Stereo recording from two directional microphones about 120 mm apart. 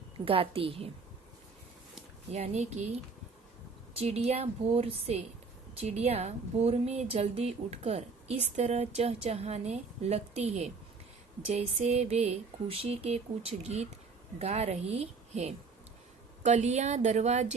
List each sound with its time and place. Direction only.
0.3 s a woman's voice: 50° right (ahead or behind)
2.3 s speech: 65° right (ahead or behind)
3.9 s a woman's voice: 55° right (ahead or behind)
16.4 s speech: 75° right (ahead or behind)